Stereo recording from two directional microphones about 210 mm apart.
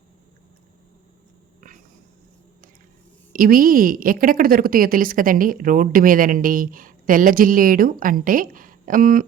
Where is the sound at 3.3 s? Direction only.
40° right (ahead or behind).